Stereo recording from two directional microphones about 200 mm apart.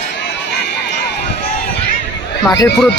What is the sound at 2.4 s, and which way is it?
Speech, 20° left (ahead or behind).